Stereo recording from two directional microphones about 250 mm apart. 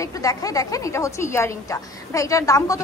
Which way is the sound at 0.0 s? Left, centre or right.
Centre.